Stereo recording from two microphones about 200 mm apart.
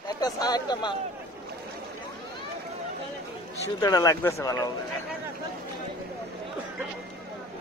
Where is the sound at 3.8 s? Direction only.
20° left (ahead or behind).